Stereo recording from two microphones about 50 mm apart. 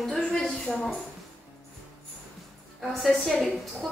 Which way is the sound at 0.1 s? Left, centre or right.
Left.